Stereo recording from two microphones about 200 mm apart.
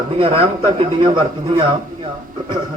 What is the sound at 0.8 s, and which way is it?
A man's voice, 25° right (ahead or behind).